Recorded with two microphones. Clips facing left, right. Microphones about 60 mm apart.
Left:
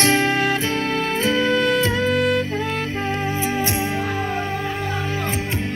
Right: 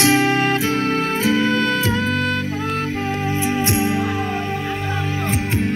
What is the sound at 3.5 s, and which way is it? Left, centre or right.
Music, right.